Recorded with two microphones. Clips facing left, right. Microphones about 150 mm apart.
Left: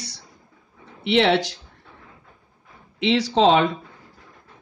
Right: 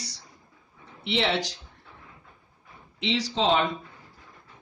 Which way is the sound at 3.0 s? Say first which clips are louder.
Left 8 dB; 65° left (ahead or behind).